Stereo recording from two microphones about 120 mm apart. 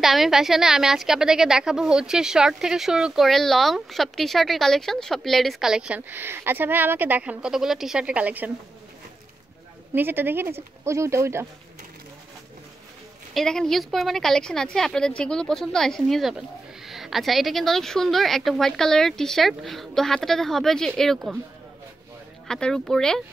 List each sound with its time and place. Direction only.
0.0 s a woman's voice: 5° right (ahead or behind)
9.9 s speech: 15° right (ahead or behind)
13.3 s a woman's voice: 5° left (ahead or behind)
22.5 s a woman's voice: 5° left (ahead or behind)